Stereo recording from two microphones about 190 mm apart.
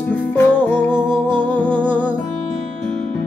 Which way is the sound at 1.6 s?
25° right (ahead or behind).